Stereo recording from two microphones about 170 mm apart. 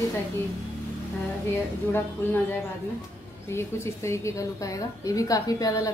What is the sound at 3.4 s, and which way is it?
A woman's voice, 15° left (ahead or behind).